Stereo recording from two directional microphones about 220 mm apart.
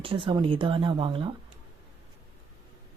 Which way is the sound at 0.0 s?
25° right (ahead or behind).